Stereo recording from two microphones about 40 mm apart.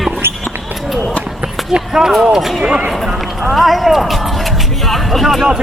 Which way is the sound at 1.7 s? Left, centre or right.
Centre.